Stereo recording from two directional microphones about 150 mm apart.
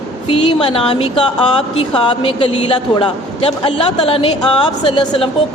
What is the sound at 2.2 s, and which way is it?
Speech, 35° left (ahead or behind).